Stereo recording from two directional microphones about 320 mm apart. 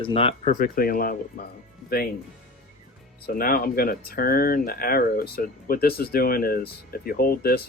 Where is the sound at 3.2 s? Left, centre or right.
Left.